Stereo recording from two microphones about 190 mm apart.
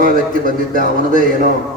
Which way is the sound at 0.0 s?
45° right (ahead or behind).